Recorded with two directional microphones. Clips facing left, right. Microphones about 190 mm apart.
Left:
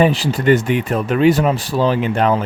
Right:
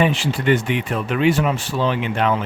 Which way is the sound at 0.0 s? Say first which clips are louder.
Left 4 dB; 40° left (ahead or behind).